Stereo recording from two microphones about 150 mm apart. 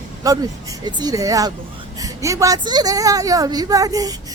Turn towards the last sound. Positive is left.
turn(degrees=-25)  # may be behind; listen again after turning